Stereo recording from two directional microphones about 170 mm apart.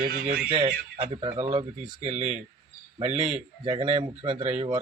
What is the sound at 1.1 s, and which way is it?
Speech, 35° right (ahead or behind).